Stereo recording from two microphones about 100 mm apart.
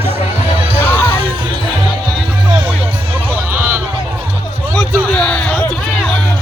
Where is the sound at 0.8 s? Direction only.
20° left (ahead or behind).